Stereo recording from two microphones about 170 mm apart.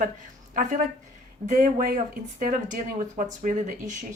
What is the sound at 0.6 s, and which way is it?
Speech, 50° right (ahead or behind).